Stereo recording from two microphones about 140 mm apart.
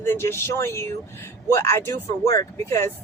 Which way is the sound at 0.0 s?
15° left (ahead or behind).